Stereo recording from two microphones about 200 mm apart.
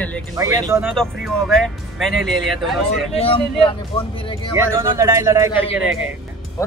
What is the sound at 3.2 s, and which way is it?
Speech, 25° left (ahead or behind).